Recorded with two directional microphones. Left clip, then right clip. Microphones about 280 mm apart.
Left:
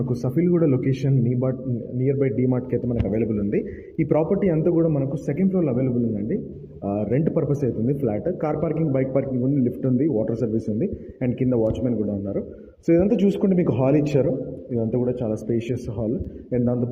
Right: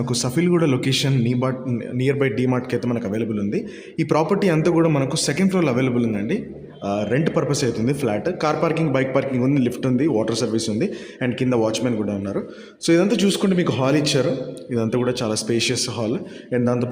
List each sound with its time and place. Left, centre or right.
0.2 s a man's voice: centre